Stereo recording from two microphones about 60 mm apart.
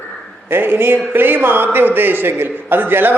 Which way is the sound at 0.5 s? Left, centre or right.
Right.